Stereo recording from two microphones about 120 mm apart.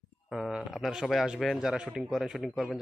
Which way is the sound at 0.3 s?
5° right (ahead or behind).